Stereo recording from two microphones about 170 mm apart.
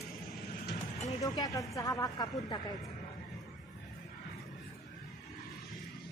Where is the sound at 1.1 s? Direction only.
20° left (ahead or behind).